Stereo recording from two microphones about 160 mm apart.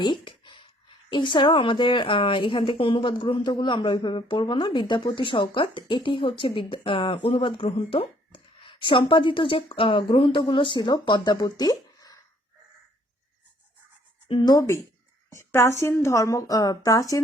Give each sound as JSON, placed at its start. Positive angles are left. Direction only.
{"t": 0.0, "sound": "a sound", "side_deg": 30}
{"t": 1.1, "sound": "speech", "side_deg": 30}
{"t": 14.3, "sound": "a woman's voice", "side_deg": 30}